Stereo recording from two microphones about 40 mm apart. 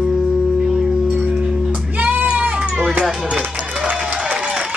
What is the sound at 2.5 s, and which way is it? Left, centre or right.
Music, right.